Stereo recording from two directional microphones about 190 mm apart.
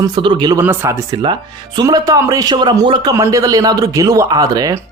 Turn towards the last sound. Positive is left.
turn(degrees=-20)  # may be behind; listen again after turning